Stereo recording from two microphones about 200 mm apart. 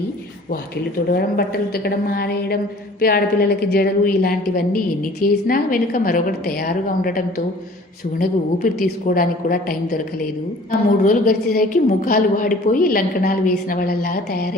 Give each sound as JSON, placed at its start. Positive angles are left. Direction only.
{"t": 1.1, "sound": "a woman's voice", "side_deg": 50}
{"t": 8.6, "sound": "a woman's voice", "side_deg": 45}